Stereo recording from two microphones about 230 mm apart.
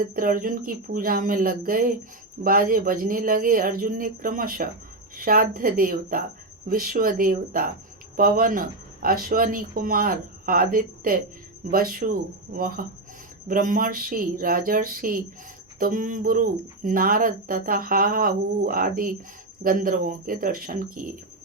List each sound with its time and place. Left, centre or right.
0.0 s speech: right